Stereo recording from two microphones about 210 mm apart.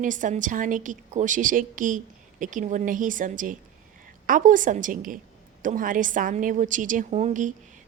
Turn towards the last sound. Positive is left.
turn(degrees=-35)  # may be behind; listen again after turning